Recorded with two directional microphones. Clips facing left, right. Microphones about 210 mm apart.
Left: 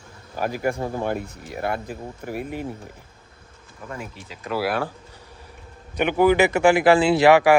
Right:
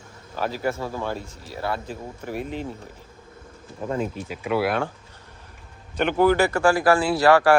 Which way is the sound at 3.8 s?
25° right (ahead or behind).